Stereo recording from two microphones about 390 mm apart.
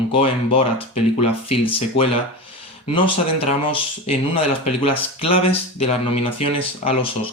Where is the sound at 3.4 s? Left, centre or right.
Centre.